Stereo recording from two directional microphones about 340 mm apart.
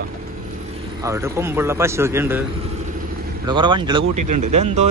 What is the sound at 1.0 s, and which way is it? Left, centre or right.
Speech, centre.